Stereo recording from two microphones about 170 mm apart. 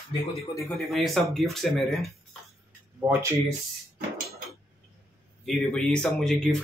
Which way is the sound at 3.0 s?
15° right (ahead or behind).